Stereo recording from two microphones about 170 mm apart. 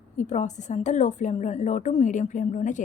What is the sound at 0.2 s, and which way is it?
A woman's voice, 45° left (ahead or behind).